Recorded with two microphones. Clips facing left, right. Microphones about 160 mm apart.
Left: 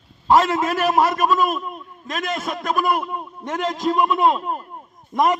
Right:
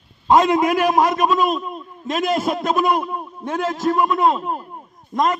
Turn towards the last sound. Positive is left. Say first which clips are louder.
# left 1 dB
turn(degrees=5)  # may be behind; listen again after turning